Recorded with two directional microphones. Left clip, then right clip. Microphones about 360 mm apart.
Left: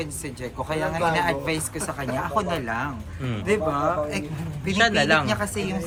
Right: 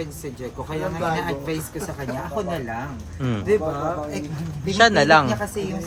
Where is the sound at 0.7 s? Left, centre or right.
Centre.